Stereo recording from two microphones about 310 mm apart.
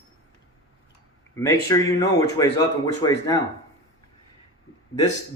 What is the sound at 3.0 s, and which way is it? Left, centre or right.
Speech, centre.